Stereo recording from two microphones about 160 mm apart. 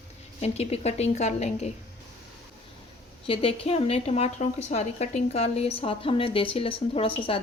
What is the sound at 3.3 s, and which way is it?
A woman's voice, 35° left (ahead or behind).